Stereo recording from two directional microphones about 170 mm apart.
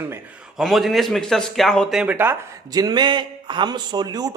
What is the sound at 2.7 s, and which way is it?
Speech, 20° right (ahead or behind).